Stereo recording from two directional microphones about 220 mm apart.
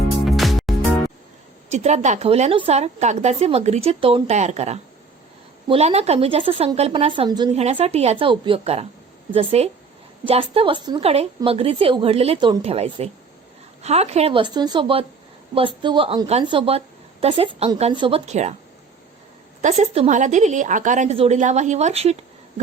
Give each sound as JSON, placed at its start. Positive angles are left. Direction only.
{"t": 0.3, "sound": "music", "side_deg": 0}
{"t": 1.7, "sound": "a woman's voice", "side_deg": -30}
{"t": 19.6, "sound": "a woman's voice", "side_deg": -30}